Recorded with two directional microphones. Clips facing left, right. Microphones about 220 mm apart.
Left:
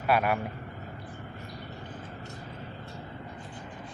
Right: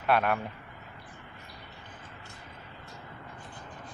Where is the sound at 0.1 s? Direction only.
5° left (ahead or behind).